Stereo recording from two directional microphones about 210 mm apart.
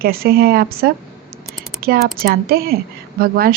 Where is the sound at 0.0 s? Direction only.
45° right (ahead or behind).